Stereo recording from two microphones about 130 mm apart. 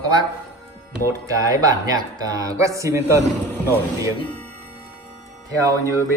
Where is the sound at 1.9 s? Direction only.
30° right (ahead or behind).